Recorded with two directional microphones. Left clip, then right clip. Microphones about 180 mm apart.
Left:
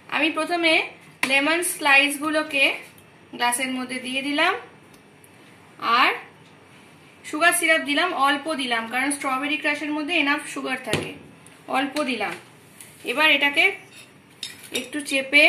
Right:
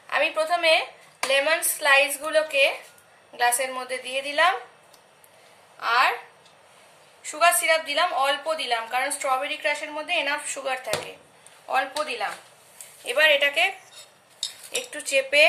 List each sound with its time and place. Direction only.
0.1 s a woman's voice: centre (ahead or behind)
5.8 s speech: 15° left (ahead or behind)
7.2 s a woman's voice: 5° left (ahead or behind)
11.6 s speech: 15° left (ahead or behind)
13.0 s a woman's voice: centre (ahead or behind)
14.8 s a woman's voice: centre (ahead or behind)